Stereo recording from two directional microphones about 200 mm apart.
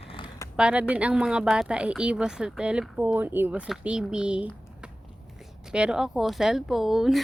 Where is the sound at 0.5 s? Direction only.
5° right (ahead or behind).